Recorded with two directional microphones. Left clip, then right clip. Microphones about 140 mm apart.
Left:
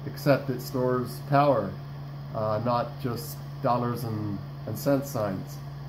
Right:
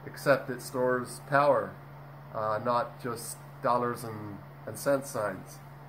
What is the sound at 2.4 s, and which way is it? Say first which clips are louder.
Speech: left 2 dB; 20° right (ahead or behind).